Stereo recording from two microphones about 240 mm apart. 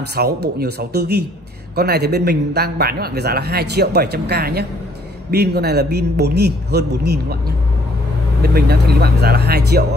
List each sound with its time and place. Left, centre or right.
0.2 s a man's voice: right